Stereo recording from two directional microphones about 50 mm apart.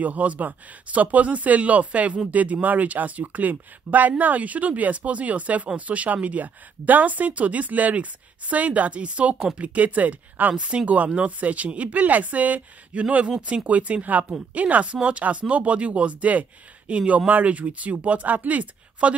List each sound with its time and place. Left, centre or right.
0.0 s speech: right
10.5 s speech: right